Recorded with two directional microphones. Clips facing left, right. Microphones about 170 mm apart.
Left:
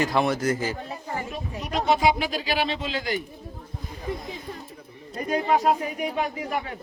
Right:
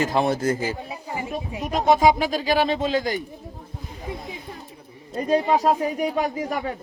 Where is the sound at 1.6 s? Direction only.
45° right (ahead or behind).